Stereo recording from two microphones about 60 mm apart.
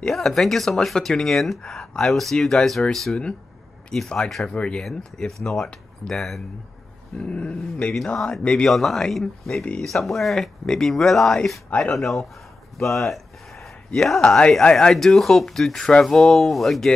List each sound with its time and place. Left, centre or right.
0.1 s speech: centre
4.5 s speech: centre
7.2 s speech: centre
8.6 s speech: centre
12.7 s a sound: centre
13.9 s speech: centre
14.6 s speech: centre